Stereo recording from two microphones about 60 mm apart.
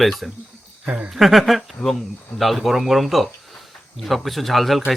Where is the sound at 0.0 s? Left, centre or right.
Centre.